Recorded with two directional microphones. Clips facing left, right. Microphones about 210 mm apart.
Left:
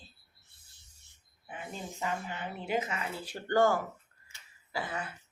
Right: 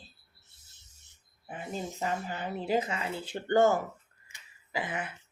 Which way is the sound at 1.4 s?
35° right (ahead or behind).